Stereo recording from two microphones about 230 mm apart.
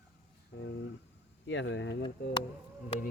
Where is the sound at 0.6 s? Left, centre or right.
Left.